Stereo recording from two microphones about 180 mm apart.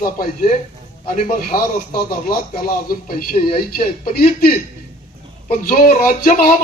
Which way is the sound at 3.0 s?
55° left (ahead or behind).